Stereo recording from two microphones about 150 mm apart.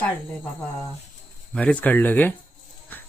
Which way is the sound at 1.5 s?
10° left (ahead or behind).